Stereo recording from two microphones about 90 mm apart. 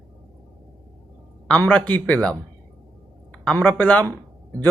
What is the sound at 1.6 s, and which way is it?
Speech, 20° left (ahead or behind).